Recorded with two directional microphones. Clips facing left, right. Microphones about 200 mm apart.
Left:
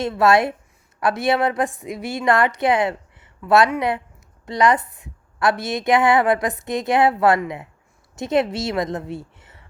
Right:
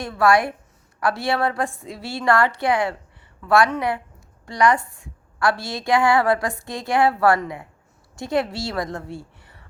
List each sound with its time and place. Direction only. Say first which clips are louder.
0.0 s a woman's voice: left 2 dB; 25° left (ahead or behind)